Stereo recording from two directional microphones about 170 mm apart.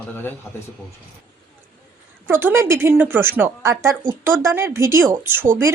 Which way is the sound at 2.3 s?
15° right (ahead or behind).